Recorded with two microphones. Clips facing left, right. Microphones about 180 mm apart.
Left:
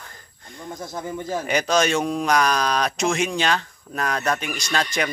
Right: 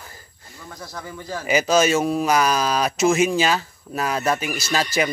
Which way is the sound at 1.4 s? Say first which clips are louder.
Right 4 dB; 5° right (ahead or behind).